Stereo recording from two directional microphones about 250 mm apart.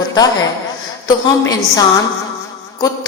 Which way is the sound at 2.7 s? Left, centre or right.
Centre.